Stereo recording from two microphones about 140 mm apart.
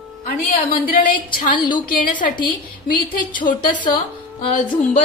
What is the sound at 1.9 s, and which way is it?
A woman's voice, 70° left (ahead or behind).